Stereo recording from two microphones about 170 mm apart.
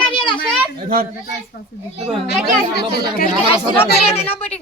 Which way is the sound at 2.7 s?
70° left (ahead or behind).